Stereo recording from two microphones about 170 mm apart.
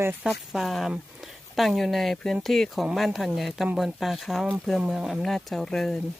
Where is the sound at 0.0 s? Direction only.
15° right (ahead or behind).